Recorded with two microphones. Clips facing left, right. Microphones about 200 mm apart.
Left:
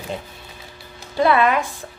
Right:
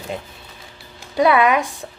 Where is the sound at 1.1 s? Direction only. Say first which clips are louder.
Right 2 dB; 15° right (ahead or behind).